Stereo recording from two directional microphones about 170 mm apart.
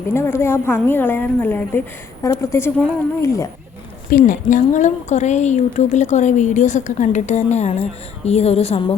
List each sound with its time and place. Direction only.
0.1 s a woman's voice: 15° left (ahead or behind)
4.1 s a woman's voice: 50° left (ahead or behind)